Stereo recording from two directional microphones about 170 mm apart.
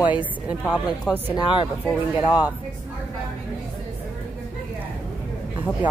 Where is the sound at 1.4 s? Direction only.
30° left (ahead or behind).